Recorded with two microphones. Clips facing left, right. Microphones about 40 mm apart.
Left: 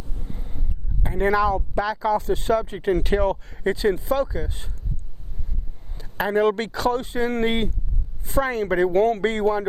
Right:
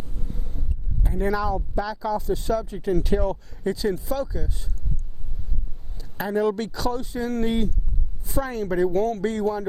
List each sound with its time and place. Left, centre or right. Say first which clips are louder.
1.0 s speech: left 5 dB; left
6.0 s a woman's voice: left 3 dB; left